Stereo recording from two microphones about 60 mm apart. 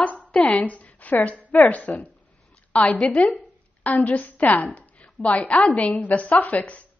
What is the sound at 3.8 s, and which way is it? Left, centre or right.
A woman's voice, left.